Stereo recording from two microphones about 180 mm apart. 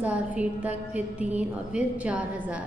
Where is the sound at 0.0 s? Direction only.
10° right (ahead or behind).